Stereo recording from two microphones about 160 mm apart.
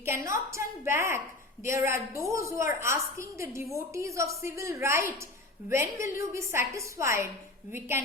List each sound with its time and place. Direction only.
0.0 s a woman's voice: 15° right (ahead or behind)